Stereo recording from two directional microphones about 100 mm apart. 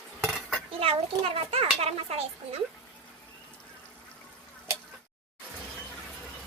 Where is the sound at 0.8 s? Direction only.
70° right (ahead or behind).